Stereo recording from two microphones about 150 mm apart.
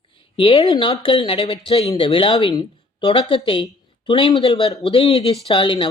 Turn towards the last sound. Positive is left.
turn(degrees=35)  # may be behind; listen again after turning